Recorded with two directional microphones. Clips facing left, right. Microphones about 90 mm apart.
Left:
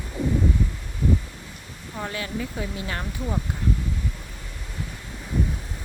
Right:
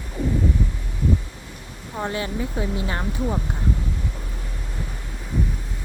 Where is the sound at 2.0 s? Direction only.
25° right (ahead or behind).